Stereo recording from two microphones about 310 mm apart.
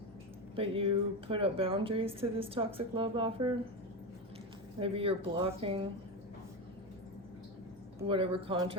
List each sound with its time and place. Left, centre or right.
0.5 s speech: centre
4.8 s speech: centre
7.9 s speech: centre